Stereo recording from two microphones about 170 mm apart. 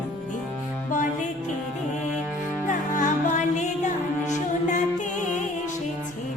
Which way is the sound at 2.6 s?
50° left (ahead or behind).